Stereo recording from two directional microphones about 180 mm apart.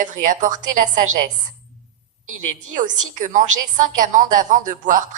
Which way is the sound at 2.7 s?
45° right (ahead or behind).